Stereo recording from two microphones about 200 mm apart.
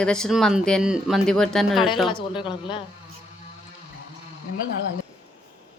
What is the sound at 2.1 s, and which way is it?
Speech, 25° left (ahead or behind).